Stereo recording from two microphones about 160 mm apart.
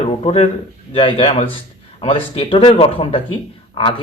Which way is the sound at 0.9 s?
35° left (ahead or behind).